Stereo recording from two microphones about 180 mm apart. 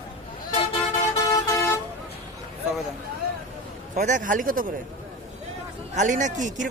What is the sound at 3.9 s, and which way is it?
Speech, 45° right (ahead or behind).